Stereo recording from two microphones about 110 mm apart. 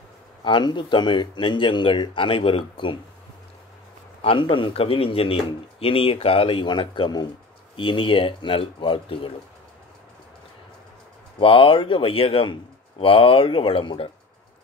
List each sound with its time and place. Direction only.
0.4 s speech: 45° left (ahead or behind)
4.2 s a man's voice: 55° left (ahead or behind)
11.3 s a man's voice: 50° left (ahead or behind)